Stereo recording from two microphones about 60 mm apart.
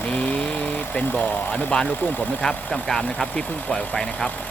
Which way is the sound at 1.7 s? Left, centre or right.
Left.